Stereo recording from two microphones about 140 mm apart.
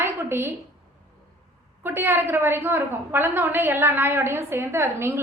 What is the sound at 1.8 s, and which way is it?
A woman's voice, 15° right (ahead or behind).